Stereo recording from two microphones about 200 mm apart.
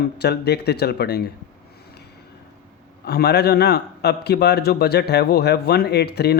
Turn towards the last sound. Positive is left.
turn(degrees=55)  # may be behind; listen again after turning